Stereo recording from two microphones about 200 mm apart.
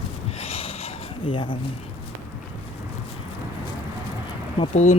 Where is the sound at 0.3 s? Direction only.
30° left (ahead or behind).